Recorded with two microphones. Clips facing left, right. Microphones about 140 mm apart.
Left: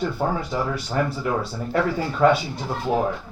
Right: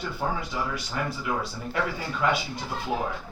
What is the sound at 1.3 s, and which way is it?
Speech, 40° left (ahead or behind).